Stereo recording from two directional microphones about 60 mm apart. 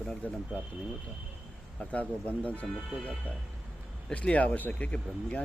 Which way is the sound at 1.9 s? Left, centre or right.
Centre.